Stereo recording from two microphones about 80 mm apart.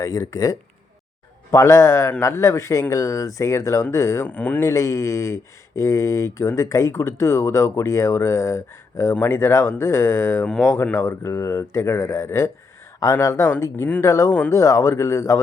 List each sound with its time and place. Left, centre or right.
0.0 s speech: left
4.3 s speech: centre
4.6 s speech: left
10.4 s speech: centre
10.9 s speech: left